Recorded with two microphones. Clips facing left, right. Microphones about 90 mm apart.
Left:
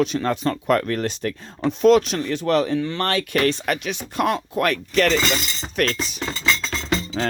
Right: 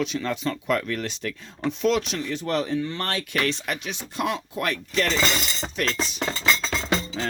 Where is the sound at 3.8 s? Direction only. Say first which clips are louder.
Left 4 dB; 60° left (ahead or behind).